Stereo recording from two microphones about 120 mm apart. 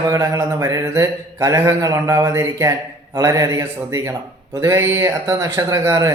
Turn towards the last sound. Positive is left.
turn(degrees=-25)  # may be behind; listen again after turning